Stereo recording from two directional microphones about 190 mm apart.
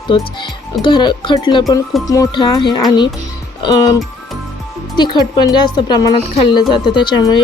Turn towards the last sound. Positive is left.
turn(degrees=20)  # may be behind; listen again after turning